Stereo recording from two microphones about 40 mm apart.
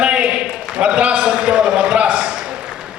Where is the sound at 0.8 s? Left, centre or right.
Right.